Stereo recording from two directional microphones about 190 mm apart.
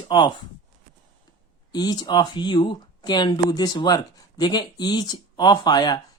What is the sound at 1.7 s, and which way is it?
Speech, 20° left (ahead or behind).